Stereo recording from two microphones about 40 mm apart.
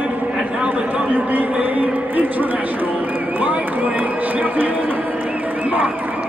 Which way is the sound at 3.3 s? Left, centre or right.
Right.